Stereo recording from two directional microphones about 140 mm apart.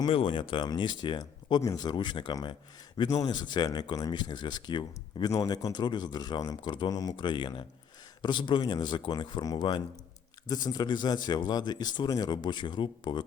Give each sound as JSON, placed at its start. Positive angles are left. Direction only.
{"t": 0.0, "sound": "speech", "side_deg": 35}